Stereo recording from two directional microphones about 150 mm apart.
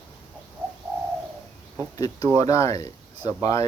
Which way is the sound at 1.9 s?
25° left (ahead or behind).